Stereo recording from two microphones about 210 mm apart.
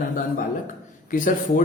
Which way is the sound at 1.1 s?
40° left (ahead or behind).